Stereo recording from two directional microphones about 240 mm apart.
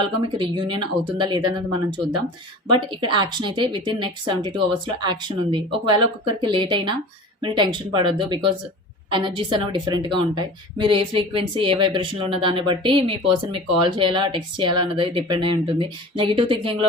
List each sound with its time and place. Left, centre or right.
0.0 s a woman's voice: centre